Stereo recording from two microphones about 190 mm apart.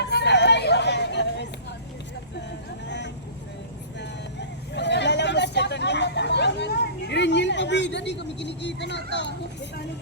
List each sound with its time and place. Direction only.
0.0 s hubbub: 65° left (ahead or behind)
4.4 s hubbub: 65° left (ahead or behind)